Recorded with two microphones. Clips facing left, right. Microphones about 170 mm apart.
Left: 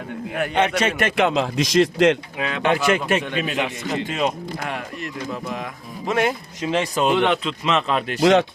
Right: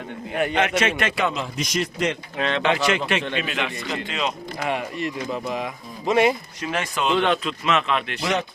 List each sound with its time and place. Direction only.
0.5 s speech: 35° left (ahead or behind)
1.2 s a man's voice: 90° left
2.4 s speech: 5° left (ahead or behind)
2.6 s a man's voice: 45° left (ahead or behind)
4.6 s speech: centre (ahead or behind)
6.6 s speech: 25° left (ahead or behind)
7.6 s speech: 35° left (ahead or behind)
8.2 s a man's voice: 90° left